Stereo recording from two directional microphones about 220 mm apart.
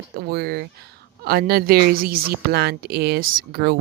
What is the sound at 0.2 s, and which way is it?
A woman's voice, 45° right (ahead or behind).